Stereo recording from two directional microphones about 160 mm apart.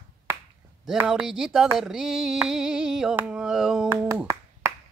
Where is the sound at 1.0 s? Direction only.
5° right (ahead or behind).